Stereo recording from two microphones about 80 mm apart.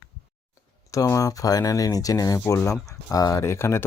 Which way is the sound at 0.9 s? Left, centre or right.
Left.